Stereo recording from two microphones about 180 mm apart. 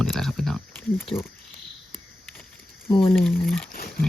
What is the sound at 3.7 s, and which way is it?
Speech, 55° left (ahead or behind).